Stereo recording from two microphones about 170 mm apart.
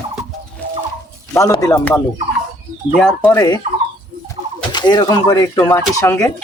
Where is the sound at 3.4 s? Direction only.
20° left (ahead or behind).